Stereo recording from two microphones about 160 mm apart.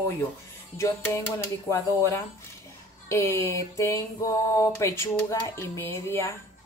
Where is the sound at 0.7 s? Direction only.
15° left (ahead or behind).